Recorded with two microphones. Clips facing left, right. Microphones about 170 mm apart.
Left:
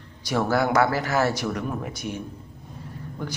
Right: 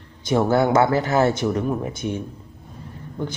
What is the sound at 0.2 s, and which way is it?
Speech, 25° right (ahead or behind).